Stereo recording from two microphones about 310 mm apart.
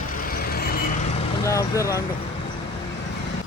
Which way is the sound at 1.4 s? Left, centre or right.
Centre.